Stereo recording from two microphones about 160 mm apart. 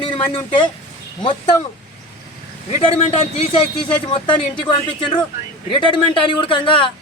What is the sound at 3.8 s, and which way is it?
A man's voice, 30° left (ahead or behind).